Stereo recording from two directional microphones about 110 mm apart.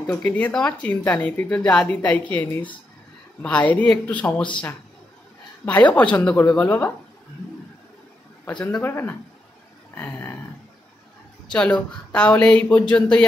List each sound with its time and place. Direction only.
0.0 s speech: 15° left (ahead or behind)
5.7 s speech: 15° left (ahead or behind)
8.5 s speech: 10° left (ahead or behind)
8.8 s a sound: 20° left (ahead or behind)
11.4 s speech: 10° left (ahead or behind)